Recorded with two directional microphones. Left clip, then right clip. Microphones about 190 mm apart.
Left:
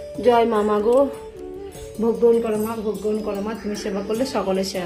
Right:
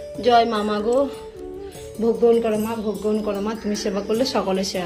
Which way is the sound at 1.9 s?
Centre (ahead or behind).